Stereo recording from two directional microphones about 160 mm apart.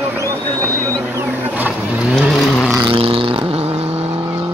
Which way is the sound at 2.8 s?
35° right (ahead or behind).